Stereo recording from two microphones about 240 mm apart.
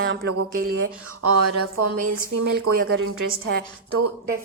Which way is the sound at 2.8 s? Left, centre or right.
Right.